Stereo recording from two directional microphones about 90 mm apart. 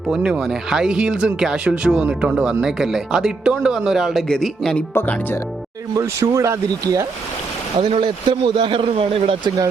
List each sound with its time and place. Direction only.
0.1 s speech: 5° right (ahead or behind)
6.0 s speech: 35° right (ahead or behind)
7.8 s speech: 75° right (ahead or behind)